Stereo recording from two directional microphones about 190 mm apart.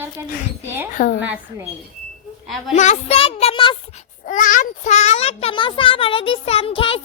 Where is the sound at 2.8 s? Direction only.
35° left (ahead or behind).